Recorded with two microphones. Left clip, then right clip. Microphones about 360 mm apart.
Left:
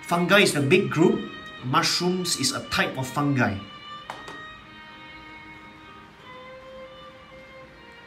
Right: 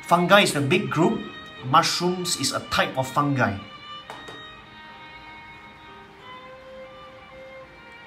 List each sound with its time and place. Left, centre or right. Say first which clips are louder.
0.0 s speech: right 2 dB; centre